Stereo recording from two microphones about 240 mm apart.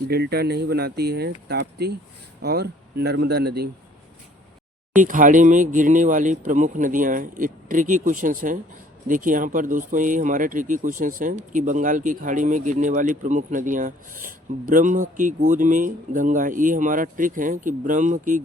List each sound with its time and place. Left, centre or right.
0.1 s speech: right
4.9 s speech: right